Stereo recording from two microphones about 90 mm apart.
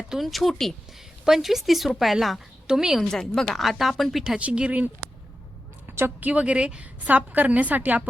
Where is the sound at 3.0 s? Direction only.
5° left (ahead or behind).